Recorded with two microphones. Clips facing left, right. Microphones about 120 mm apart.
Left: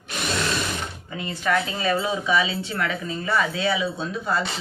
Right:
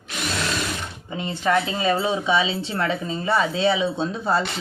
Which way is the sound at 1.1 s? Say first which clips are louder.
Right 3 dB; 25° right (ahead or behind).